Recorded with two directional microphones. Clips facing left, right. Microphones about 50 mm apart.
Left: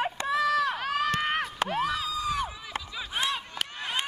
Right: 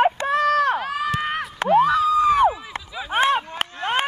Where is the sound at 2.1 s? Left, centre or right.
Right.